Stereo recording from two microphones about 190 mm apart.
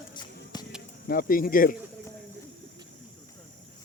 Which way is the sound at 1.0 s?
50° left (ahead or behind).